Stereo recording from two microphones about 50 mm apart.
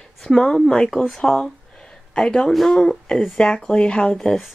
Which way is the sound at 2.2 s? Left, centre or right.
Centre.